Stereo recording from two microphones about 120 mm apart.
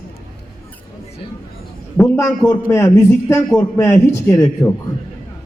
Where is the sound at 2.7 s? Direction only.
20° left (ahead or behind).